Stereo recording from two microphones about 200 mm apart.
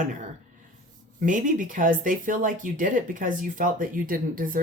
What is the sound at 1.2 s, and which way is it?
Speech, 40° right (ahead or behind).